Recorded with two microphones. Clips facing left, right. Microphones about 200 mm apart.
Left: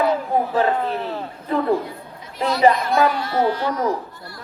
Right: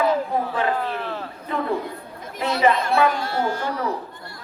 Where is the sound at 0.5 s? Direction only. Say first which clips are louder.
Left 4 dB; 35° left (ahead or behind).